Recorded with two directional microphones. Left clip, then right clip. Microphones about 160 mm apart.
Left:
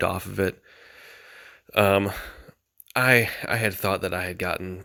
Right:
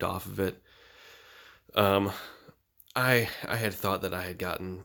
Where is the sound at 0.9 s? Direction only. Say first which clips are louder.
Left 5 dB; 25° left (ahead or behind).